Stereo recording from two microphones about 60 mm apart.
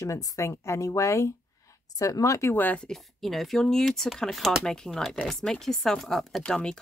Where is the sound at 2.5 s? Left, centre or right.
Left.